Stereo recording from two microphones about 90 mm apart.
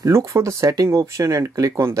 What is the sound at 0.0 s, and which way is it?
Speech, 35° right (ahead or behind).